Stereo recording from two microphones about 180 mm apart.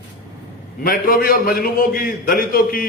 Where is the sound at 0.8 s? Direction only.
55° left (ahead or behind).